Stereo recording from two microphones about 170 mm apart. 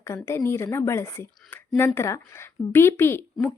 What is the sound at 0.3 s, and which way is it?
Speech, 15° left (ahead or behind).